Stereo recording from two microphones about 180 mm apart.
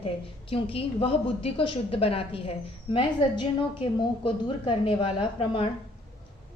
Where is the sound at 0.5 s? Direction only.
30° left (ahead or behind).